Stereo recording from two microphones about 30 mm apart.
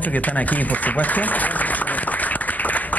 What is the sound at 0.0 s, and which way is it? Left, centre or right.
A man's voice, left.